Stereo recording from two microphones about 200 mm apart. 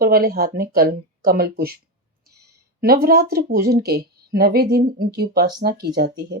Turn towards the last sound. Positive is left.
turn(degrees=-55)  # may be behind; listen again after turning